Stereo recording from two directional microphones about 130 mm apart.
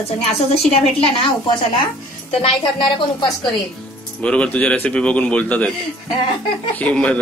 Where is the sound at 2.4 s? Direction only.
40° left (ahead or behind).